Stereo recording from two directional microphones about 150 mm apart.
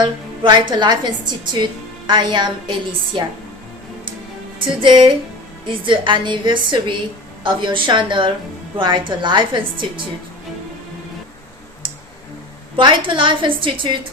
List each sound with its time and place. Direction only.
0.0 s a woman's voice: 30° right (ahead or behind)
4.8 s a woman's voice: 30° right (ahead or behind)
12.7 s a woman's voice: 35° right (ahead or behind)